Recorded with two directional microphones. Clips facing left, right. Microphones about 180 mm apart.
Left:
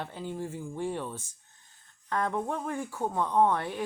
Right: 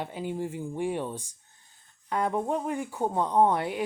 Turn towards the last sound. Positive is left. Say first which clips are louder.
# right 2 dB
turn(degrees=-15)  # may be behind; listen again after turning